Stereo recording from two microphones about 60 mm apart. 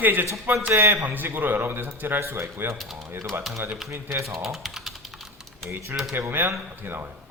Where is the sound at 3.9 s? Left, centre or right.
Right.